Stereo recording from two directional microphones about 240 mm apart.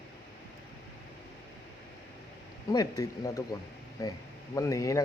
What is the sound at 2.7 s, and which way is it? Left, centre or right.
Speech, centre.